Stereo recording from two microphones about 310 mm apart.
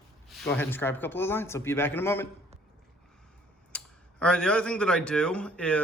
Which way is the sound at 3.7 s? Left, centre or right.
Centre.